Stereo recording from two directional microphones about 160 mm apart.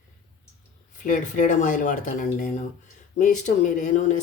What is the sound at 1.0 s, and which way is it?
Speech, 55° left (ahead or behind).